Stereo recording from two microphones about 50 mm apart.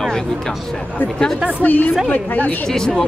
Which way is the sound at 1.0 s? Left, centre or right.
Centre.